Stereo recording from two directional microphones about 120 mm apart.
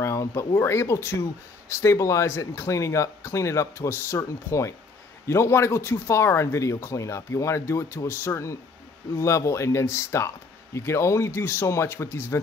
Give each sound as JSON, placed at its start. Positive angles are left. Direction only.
{"t": 0.0, "sound": "speech", "side_deg": 25}